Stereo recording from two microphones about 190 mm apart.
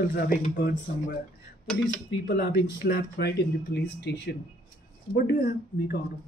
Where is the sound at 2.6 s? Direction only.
50° left (ahead or behind).